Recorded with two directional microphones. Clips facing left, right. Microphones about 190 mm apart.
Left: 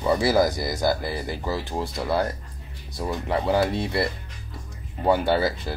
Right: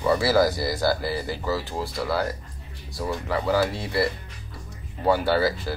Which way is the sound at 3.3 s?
25° left (ahead or behind).